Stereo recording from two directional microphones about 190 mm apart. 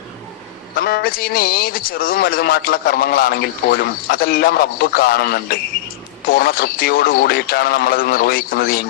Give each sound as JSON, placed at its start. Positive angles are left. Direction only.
{"t": 0.8, "sound": "a man's voice", "side_deg": 50}